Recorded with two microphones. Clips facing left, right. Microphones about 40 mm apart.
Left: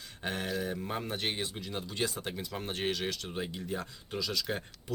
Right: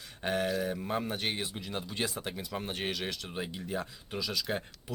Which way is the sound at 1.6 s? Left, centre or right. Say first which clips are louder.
Left 1 dB; centre.